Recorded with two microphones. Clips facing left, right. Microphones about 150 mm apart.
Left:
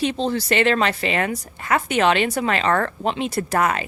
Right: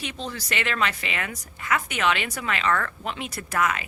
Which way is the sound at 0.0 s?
30° left (ahead or behind).